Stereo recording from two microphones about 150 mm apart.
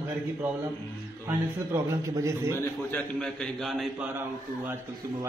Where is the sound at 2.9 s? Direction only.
5° left (ahead or behind).